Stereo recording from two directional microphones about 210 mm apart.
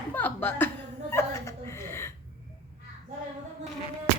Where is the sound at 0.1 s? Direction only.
10° left (ahead or behind).